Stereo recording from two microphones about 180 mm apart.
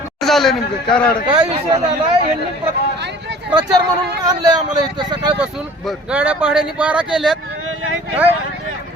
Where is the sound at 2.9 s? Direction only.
70° right (ahead or behind).